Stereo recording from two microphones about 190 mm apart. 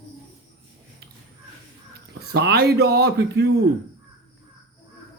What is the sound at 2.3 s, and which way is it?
Speech, 60° right (ahead or behind).